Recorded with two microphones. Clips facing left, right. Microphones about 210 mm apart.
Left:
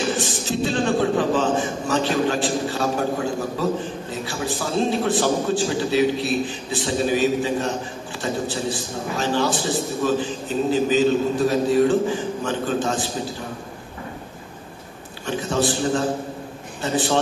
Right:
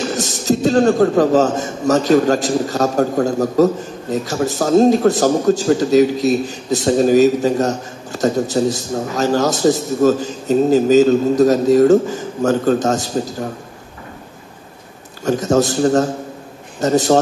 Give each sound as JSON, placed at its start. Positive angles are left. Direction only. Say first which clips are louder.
{"t": 0.1, "sound": "a man's voice", "louder": "right 6 dB", "side_deg": -40}
{"t": 15.2, "sound": "a man's voice", "louder": "right 7 dB", "side_deg": -40}